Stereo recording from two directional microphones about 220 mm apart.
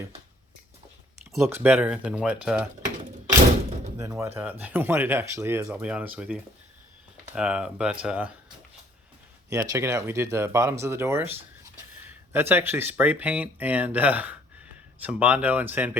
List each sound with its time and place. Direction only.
1.5 s speech: 10° right (ahead or behind)
3.9 s speech: 15° right (ahead or behind)
9.5 s speech: 15° right (ahead or behind)